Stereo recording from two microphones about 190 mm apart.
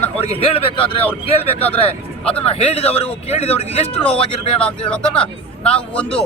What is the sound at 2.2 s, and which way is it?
Speech, 5° left (ahead or behind).